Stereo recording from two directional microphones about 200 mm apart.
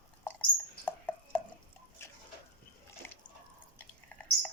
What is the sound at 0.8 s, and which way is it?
Chopping, 10° left (ahead or behind).